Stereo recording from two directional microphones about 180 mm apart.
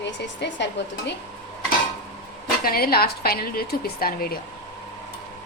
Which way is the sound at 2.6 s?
55° left (ahead or behind).